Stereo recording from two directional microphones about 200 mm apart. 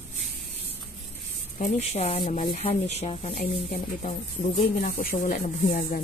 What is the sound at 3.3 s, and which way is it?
Speech, 40° left (ahead or behind).